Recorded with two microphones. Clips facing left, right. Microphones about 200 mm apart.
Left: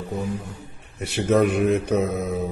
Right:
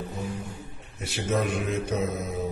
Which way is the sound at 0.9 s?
60° left (ahead or behind).